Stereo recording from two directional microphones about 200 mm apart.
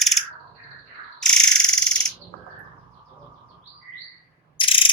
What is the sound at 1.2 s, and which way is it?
Bird, 5° left (ahead or behind).